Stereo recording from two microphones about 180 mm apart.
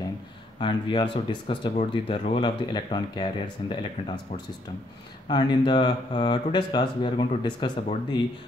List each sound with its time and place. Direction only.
0.6 s speech: 25° left (ahead or behind)
5.3 s speech: 25° left (ahead or behind)